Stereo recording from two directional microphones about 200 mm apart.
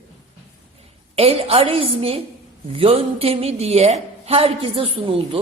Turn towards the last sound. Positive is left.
turn(degrees=-25)  # may be behind; listen again after turning